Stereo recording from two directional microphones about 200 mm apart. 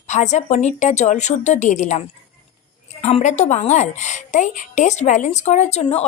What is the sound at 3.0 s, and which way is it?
A woman's voice, 35° left (ahead or behind).